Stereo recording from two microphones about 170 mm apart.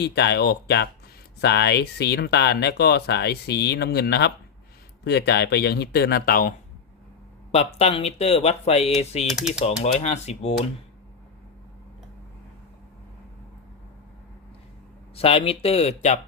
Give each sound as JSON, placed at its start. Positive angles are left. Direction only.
{"t": 0.0, "sound": "speech", "side_deg": 80}
{"t": 7.5, "sound": "speech", "side_deg": 40}
{"t": 9.2, "sound": "speech", "side_deg": 0}
{"t": 9.6, "sound": "speech", "side_deg": 40}
{"t": 15.1, "sound": "speech", "side_deg": 35}